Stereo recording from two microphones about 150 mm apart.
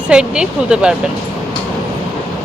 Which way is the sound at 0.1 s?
5° right (ahead or behind).